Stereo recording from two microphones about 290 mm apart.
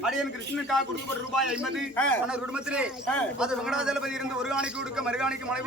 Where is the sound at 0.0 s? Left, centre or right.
Centre.